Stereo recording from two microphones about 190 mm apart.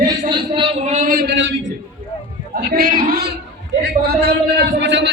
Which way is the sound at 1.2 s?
70° right (ahead or behind).